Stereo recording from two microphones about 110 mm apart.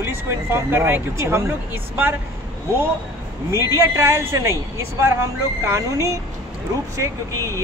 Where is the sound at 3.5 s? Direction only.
25° right (ahead or behind).